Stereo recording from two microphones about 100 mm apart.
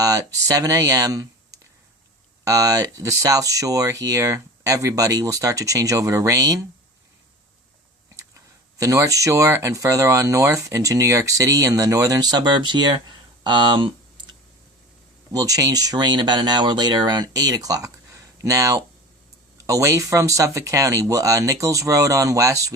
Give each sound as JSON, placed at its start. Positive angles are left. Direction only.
{"t": 0.0, "sound": "speech", "side_deg": -35}
{"t": 8.8, "sound": "speech", "side_deg": -35}
{"t": 13.4, "sound": "a sound", "side_deg": -50}
{"t": 15.3, "sound": "speech", "side_deg": -40}